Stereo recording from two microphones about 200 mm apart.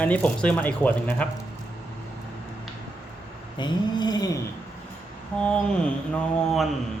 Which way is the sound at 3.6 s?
20° left (ahead or behind).